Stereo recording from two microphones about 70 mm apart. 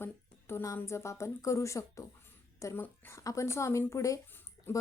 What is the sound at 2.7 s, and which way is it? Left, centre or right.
A woman's voice, left.